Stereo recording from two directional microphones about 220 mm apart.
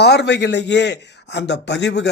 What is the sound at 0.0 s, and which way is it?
A man's voice, 50° left (ahead or behind).